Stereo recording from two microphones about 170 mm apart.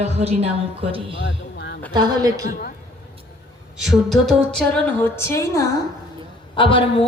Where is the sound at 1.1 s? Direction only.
90° left.